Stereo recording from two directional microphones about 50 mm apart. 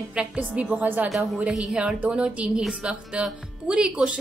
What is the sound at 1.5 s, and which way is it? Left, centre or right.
Speech, centre.